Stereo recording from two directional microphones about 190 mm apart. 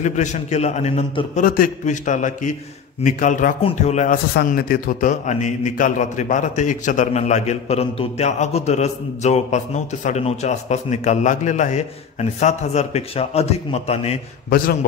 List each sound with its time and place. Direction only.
0.0 s a man's voice: 40° left (ahead or behind)
4.3 s a man's voice: 55° left (ahead or behind); by 14.1 s 35° left (ahead or behind)